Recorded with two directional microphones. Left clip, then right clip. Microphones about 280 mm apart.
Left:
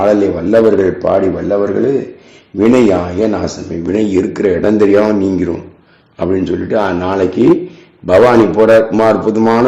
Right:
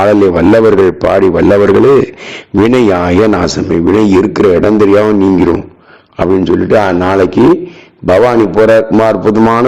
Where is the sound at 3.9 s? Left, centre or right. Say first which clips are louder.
Right 3 dB; right.